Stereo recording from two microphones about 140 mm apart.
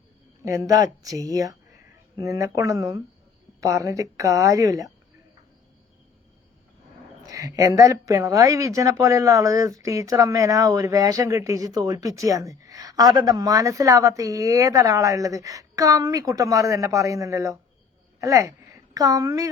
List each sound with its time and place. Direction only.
0.4 s a woman's voice: 20° right (ahead or behind)
7.2 s a woman's voice: 25° right (ahead or behind)